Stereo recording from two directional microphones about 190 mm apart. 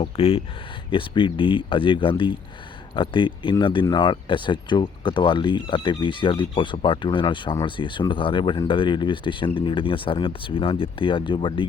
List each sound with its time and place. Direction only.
0.0 s speech: 30° left (ahead or behind)